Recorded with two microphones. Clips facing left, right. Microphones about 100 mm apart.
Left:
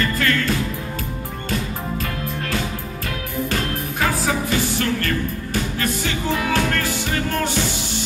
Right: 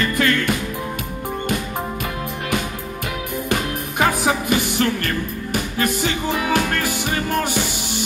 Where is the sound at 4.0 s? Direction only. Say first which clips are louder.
Right 3 dB; 15° right (ahead or behind).